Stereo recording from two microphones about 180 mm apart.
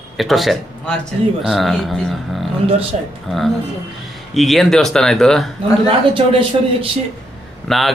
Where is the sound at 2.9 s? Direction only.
40° right (ahead or behind).